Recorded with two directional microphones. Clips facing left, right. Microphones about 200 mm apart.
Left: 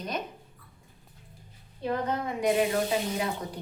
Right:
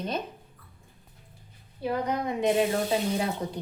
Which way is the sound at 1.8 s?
15° right (ahead or behind).